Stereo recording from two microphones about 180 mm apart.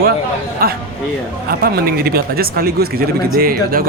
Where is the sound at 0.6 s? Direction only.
55° right (ahead or behind).